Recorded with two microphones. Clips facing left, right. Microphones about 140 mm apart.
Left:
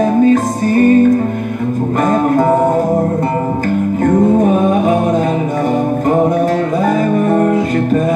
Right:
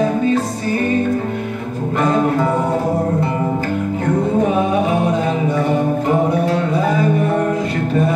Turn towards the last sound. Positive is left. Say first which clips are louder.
# left 4 dB
turn(degrees=45)  # may be behind; listen again after turning